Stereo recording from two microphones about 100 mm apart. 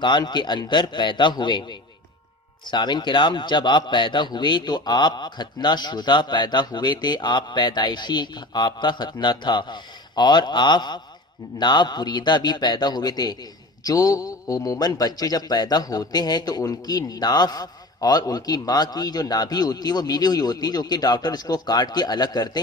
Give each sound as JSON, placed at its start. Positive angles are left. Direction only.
{"t": 0.0, "sound": "a man's voice", "side_deg": 50}